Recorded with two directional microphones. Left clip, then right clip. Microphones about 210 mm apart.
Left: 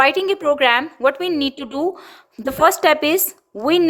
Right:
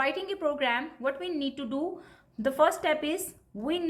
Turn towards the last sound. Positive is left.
turn(degrees=50)  # may be behind; listen again after turning